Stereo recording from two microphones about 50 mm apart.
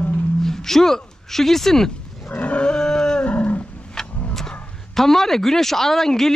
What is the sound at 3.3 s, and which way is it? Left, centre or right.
Cattle, left.